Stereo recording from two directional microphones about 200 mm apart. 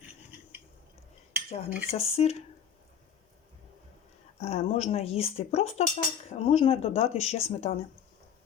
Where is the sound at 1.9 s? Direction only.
30° left (ahead or behind).